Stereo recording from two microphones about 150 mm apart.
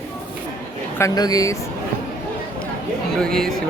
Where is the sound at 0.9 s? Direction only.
25° left (ahead or behind).